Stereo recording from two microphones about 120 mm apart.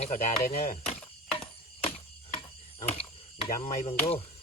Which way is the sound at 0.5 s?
60° left (ahead or behind).